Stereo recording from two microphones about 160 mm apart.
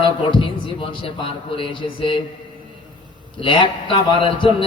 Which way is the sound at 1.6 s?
35° left (ahead or behind).